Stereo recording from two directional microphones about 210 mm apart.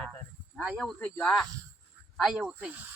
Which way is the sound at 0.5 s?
Centre (ahead or behind).